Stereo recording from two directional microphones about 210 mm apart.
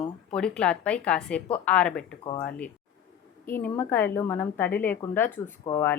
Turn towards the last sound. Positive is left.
turn(degrees=10)  # may be behind; listen again after turning